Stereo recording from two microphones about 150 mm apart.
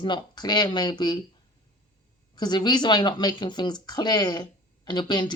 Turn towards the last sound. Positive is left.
turn(degrees=30)  # may be behind; listen again after turning